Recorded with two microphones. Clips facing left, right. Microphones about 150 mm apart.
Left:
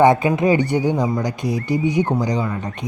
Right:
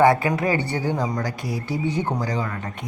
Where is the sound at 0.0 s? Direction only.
20° left (ahead or behind).